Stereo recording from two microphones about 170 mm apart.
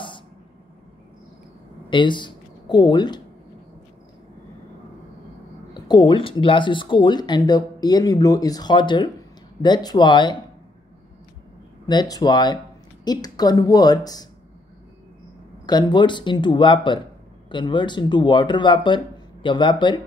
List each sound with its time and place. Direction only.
1.9 s speech: 30° left (ahead or behind)
5.8 s speech: 25° left (ahead or behind)
11.8 s speech: 25° left (ahead or behind)
15.6 s speech: 25° left (ahead or behind)